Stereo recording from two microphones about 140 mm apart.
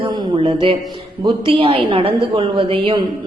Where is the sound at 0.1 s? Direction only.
40° right (ahead or behind).